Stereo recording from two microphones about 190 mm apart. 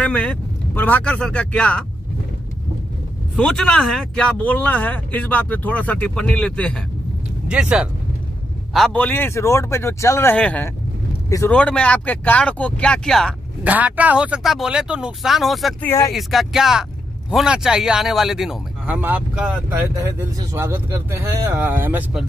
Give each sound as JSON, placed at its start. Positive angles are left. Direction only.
{"t": 0.0, "sound": "speech", "side_deg": 5}
{"t": 3.3, "sound": "speech", "side_deg": 5}
{"t": 7.4, "sound": "speech", "side_deg": -5}
{"t": 8.7, "sound": "speech", "side_deg": 5}
{"t": 11.5, "sound": "speech", "side_deg": 5}
{"t": 13.7, "sound": "speech", "side_deg": -10}